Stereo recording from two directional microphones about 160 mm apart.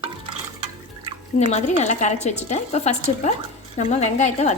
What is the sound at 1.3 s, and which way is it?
Speech, 45° left (ahead or behind).